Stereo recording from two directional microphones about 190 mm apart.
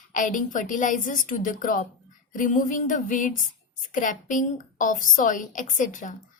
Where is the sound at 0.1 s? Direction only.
45° left (ahead or behind).